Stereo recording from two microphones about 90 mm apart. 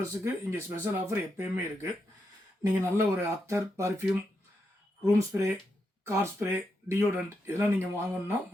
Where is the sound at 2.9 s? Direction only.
30° right (ahead or behind).